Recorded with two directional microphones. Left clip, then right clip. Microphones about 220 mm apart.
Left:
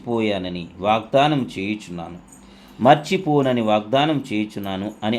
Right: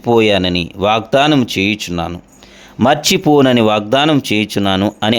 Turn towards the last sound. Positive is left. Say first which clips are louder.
# right 11 dB
turn(degrees=-45)  # may be behind; listen again after turning